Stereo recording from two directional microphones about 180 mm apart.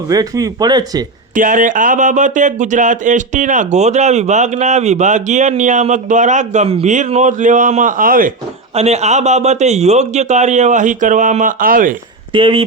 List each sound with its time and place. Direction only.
0.1 s speech: 20° right (ahead or behind)
1.3 s speech: 45° right (ahead or behind)
8.7 s a man's voice: 35° right (ahead or behind)
12.3 s speech: 30° right (ahead or behind)